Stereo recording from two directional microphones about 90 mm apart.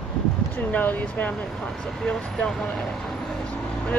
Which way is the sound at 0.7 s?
15° left (ahead or behind).